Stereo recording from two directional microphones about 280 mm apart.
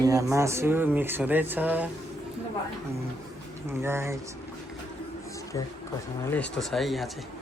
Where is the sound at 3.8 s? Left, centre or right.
Centre.